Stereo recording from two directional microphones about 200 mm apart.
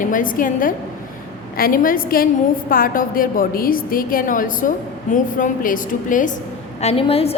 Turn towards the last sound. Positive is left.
turn(degrees=30)  # may be behind; listen again after turning